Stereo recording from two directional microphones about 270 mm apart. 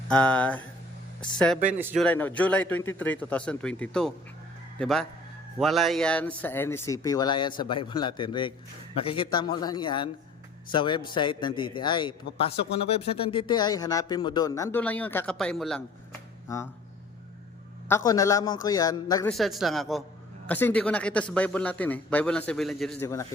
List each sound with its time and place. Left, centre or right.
0.1 s a man's voice: centre
1.7 s a man's voice: centre
2.0 s a man's voice: centre
17.8 s speech: centre
19.3 s a man's voice: centre